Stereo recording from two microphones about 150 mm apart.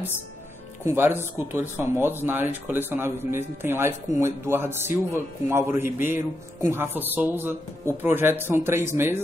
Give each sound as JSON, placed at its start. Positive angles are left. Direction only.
{"t": 0.8, "sound": "speech", "side_deg": -15}